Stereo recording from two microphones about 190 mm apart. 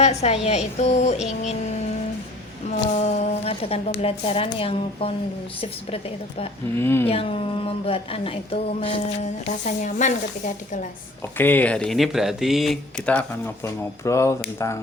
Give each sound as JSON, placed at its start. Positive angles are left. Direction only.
{"t": 0.0, "sound": "a woman's voice", "side_deg": 35}
{"t": 2.8, "sound": "a woman's voice", "side_deg": 35}
{"t": 6.7, "sound": "speech", "side_deg": 10}
{"t": 7.1, "sound": "a woman's voice", "side_deg": 30}
{"t": 9.6, "sound": "speech", "side_deg": 40}
{"t": 11.3, "sound": "speech", "side_deg": 10}
{"t": 14.0, "sound": "speech", "side_deg": 15}